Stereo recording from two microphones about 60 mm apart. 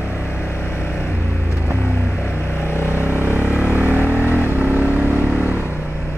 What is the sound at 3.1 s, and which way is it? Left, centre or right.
Vehicle, right.